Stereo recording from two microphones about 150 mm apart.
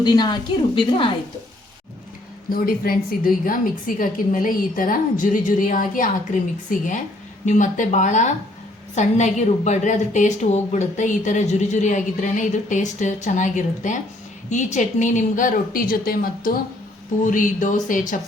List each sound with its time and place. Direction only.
0.0 s a woman's voice: 30° left (ahead or behind)
2.5 s a woman's voice: 75° left (ahead or behind)
17.2 s a woman's voice: 60° left (ahead or behind)